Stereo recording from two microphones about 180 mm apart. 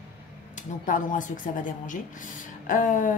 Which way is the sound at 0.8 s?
45° left (ahead or behind).